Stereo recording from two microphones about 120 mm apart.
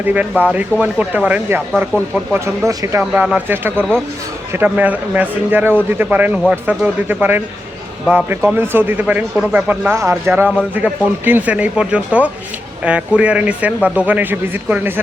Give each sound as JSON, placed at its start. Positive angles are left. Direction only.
{"t": 0.0, "sound": "speech", "side_deg": -15}
{"t": 3.0, "sound": "speech", "side_deg": -10}